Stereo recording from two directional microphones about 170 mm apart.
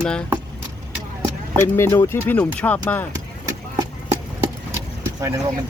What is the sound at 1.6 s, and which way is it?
Speech, 15° left (ahead or behind).